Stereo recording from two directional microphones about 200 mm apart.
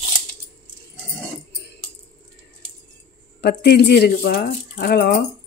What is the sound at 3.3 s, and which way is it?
Speech, 55° left (ahead or behind).